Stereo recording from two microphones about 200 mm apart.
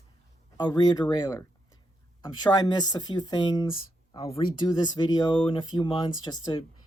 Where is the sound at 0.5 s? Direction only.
20° left (ahead or behind).